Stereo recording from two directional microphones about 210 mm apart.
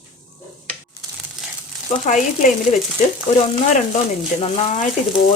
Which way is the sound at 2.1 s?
35° left (ahead or behind).